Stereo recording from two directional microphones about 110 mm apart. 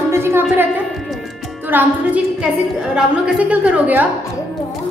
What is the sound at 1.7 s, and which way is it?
Speech, 20° right (ahead or behind).